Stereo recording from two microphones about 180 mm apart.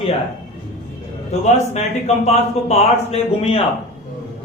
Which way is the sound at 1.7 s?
35° left (ahead or behind).